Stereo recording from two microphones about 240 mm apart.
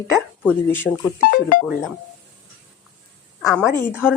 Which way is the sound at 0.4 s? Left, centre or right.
Centre.